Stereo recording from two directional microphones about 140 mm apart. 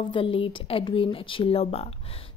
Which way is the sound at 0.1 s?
40° left (ahead or behind).